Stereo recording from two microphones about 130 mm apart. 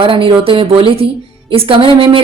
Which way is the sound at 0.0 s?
45° right (ahead or behind).